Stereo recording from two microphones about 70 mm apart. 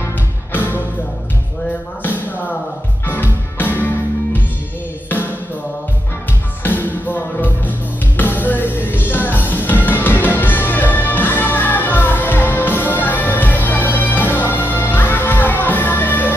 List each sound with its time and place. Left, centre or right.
0.0 s music: left
3.1 s music: left
6.6 s music: left